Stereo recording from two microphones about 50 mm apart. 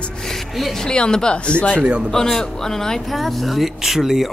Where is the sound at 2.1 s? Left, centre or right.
Centre.